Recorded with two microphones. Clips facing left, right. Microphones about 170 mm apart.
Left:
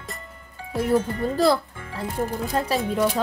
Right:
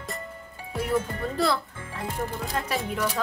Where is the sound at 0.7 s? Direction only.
35° left (ahead or behind).